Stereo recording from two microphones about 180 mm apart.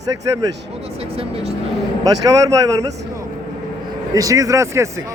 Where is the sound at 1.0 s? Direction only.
35° right (ahead or behind).